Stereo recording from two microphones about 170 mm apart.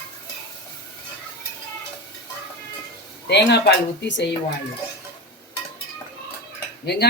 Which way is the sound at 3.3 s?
90° left.